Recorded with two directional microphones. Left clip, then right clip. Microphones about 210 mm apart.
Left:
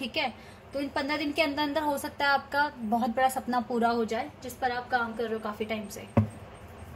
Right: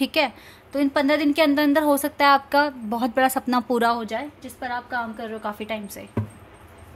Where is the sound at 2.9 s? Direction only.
70° right (ahead or behind).